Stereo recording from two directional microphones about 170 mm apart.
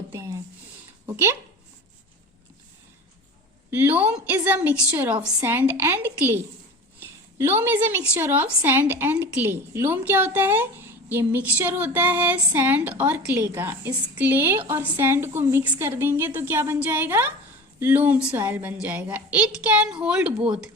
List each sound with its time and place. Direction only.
0.1 s a sound: 15° right (ahead or behind)
1.1 s speech: 15° right (ahead or behind)
3.7 s a woman's voice: 10° right (ahead or behind)